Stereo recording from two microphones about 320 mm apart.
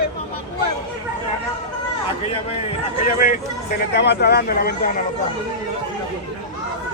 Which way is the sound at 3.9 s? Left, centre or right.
Left.